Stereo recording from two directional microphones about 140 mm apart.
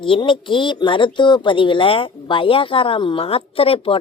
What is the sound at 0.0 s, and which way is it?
Speech, 35° left (ahead or behind).